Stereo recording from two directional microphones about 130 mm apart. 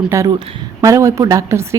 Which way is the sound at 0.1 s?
20° right (ahead or behind).